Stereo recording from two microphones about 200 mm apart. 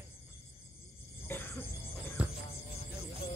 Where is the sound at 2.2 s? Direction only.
5° right (ahead or behind).